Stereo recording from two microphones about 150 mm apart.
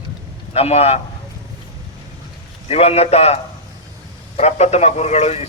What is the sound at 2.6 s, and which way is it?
A man's voice, 40° left (ahead or behind).